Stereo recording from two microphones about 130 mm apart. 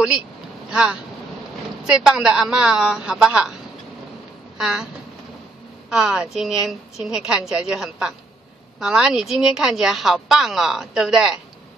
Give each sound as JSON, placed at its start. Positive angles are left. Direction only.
{"t": 0.7, "sound": "a woman's voice", "side_deg": -5}
{"t": 4.6, "sound": "speech", "side_deg": -5}
{"t": 5.9, "sound": "speech", "side_deg": -5}